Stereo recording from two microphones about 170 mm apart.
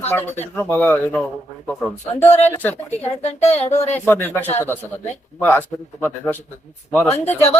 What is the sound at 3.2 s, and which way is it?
Speech, 40° left (ahead or behind).